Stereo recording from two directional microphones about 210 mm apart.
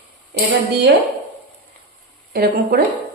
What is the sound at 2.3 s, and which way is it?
Speech, 45° right (ahead or behind).